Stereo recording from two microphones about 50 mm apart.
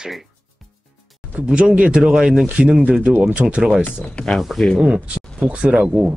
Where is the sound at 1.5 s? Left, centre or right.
Centre.